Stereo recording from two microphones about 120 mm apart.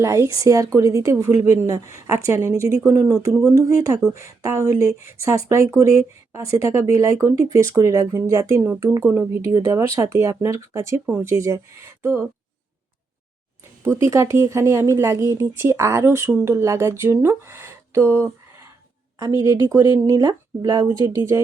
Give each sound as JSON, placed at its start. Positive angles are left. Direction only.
{"t": 0.0, "sound": "speech", "side_deg": -25}
{"t": 13.8, "sound": "speech", "side_deg": -20}
{"t": 17.2, "sound": "a sound", "side_deg": -20}
{"t": 19.2, "sound": "speech", "side_deg": -30}